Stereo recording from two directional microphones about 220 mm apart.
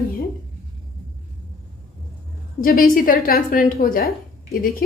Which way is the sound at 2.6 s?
40° left (ahead or behind).